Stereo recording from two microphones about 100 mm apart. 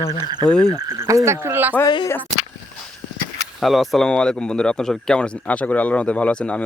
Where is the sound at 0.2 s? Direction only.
45° right (ahead or behind).